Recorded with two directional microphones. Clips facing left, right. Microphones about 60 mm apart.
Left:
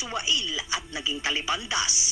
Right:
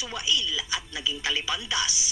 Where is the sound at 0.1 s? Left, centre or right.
Left.